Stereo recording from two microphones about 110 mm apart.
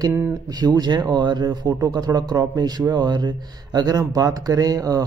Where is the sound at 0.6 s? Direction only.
40° right (ahead or behind).